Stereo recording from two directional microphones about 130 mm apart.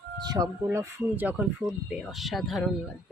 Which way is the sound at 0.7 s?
20° right (ahead or behind).